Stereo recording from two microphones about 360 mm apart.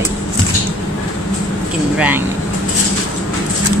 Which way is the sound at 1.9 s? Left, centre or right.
Centre.